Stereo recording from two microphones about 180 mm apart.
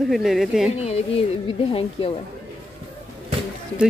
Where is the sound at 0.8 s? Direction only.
35° left (ahead or behind).